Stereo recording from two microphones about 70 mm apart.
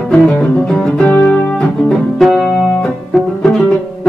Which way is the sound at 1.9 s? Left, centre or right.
Centre.